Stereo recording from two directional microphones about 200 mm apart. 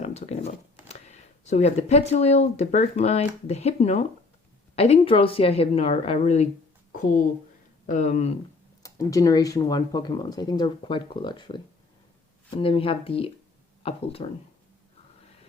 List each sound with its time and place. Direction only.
0.0 s speech: 30° left (ahead or behind)
7.9 s speech: 35° left (ahead or behind)
8.8 s speech: 15° left (ahead or behind)